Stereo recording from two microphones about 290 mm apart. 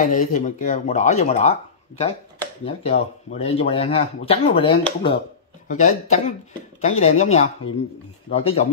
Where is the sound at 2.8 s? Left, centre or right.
Left.